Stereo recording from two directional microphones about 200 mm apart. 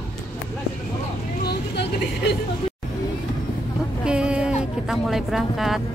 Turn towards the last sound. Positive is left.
turn(degrees=0)  # may be behind; listen again after turning